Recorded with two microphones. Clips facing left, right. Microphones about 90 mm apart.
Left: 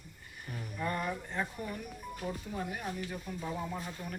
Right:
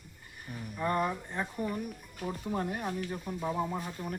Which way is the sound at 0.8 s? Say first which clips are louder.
Right 5 dB; 30° right (ahead or behind).